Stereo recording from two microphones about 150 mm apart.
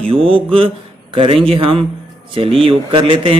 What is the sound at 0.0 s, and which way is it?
A man's voice, 35° right (ahead or behind).